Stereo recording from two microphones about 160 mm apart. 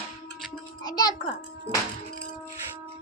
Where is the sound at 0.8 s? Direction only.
25° left (ahead or behind).